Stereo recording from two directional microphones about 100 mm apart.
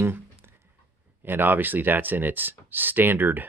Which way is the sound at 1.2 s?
20° right (ahead or behind).